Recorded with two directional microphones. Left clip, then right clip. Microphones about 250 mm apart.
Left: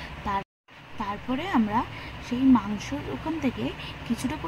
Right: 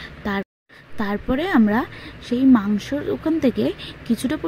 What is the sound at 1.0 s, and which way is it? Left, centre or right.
Speech, right.